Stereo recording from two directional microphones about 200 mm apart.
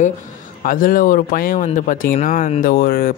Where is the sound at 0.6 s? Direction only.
45° left (ahead or behind).